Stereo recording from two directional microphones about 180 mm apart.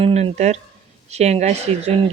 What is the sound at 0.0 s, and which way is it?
Speech, 35° right (ahead or behind).